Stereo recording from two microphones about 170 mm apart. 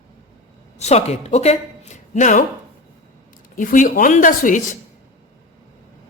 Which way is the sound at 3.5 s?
50° left (ahead or behind).